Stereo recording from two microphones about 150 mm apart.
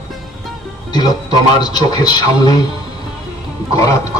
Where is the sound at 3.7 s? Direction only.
25° left (ahead or behind).